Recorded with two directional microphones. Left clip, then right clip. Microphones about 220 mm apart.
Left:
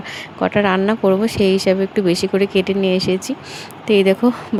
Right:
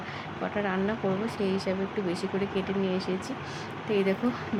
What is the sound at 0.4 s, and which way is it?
Speech, 45° left (ahead or behind).